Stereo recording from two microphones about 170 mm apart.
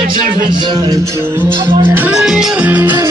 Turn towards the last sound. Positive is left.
turn(degrees=-10)  # may be behind; listen again after turning